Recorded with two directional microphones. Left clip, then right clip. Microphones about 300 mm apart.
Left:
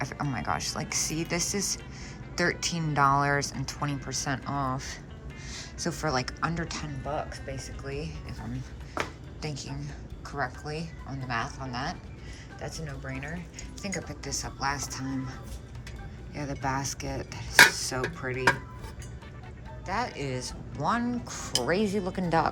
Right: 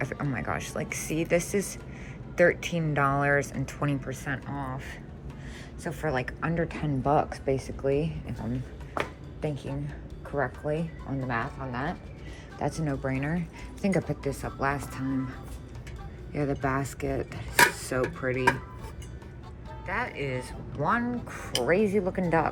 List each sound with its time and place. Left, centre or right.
0.0 s dishes: centre
4.2 s speech: centre
5.8 s dishes: centre
7.2 s speech: centre
9.0 s a sound: centre
10.3 s dishes: centre
12.6 s speech: centre
13.8 s dishes: centre
19.9 s speech: centre
21.5 s dishes: centre